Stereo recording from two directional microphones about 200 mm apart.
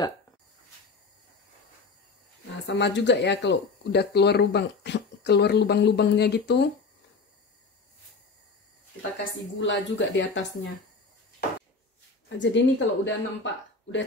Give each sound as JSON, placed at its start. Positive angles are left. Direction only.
{"t": 2.6, "sound": "speech", "side_deg": 60}
{"t": 9.6, "sound": "speech", "side_deg": 65}
{"t": 12.3, "sound": "speech", "side_deg": 65}